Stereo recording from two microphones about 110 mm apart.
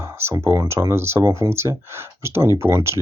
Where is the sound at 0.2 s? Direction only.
25° right (ahead or behind).